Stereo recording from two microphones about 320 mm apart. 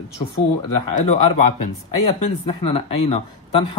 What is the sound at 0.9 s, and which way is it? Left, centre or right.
Speech, left.